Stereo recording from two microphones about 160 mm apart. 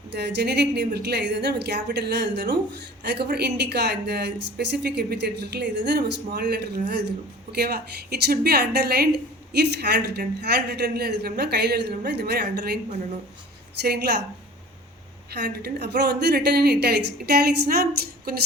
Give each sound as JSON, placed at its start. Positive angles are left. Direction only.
{"t": 0.1, "sound": "a woman's voice", "side_deg": -90}
{"t": 13.8, "sound": "a woman's voice", "side_deg": -90}
{"t": 15.3, "sound": "a woman's voice", "side_deg": -85}